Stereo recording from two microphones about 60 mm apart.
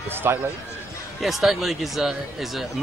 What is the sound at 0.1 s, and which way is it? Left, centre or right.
Speech, right.